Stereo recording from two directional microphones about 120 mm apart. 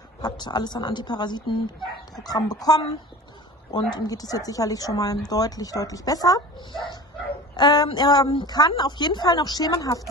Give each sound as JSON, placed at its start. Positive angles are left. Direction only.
{"t": 0.2, "sound": "speech", "side_deg": 35}
{"t": 7.5, "sound": "speech", "side_deg": 35}